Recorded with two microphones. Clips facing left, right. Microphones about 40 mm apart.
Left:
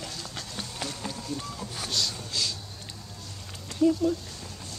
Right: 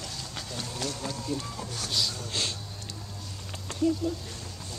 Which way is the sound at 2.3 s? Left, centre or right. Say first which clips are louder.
Even; right.